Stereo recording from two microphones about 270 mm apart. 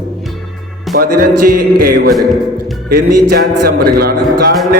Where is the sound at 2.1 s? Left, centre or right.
Centre.